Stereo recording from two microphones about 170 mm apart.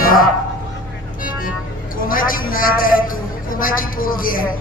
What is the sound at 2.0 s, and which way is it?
A man's voice, 55° left (ahead or behind).